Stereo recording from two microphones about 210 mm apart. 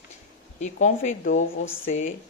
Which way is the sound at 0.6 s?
35° left (ahead or behind).